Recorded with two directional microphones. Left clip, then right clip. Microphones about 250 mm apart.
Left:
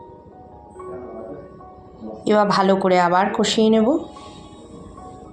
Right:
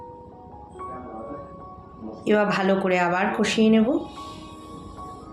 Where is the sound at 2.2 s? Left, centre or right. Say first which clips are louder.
Left 5 dB; centre.